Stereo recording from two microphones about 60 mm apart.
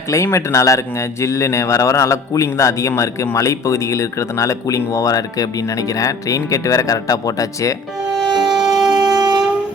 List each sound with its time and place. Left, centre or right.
0.1 s speech: left
8.2 s shofar: centre